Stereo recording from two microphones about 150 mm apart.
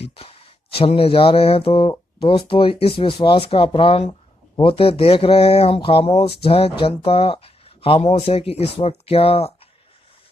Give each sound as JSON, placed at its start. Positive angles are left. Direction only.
{"t": 0.0, "sound": "speech", "side_deg": 40}